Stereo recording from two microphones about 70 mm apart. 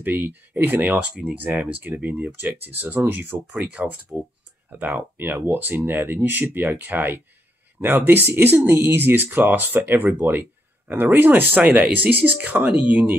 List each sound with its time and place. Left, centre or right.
0.0 s speech: right
0.7 s speech: right